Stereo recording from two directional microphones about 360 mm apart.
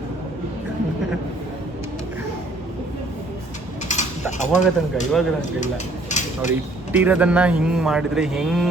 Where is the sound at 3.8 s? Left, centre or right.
Centre.